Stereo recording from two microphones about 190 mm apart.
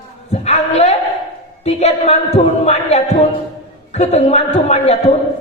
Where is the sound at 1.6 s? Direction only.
35° left (ahead or behind).